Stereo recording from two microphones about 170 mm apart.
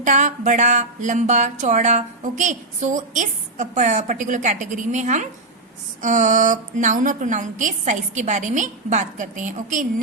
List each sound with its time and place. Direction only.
0.0 s speech: 45° right (ahead or behind)